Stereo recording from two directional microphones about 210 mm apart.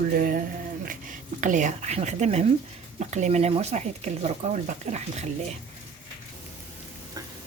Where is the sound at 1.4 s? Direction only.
35° right (ahead or behind).